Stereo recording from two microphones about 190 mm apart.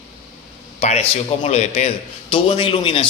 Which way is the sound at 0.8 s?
35° left (ahead or behind).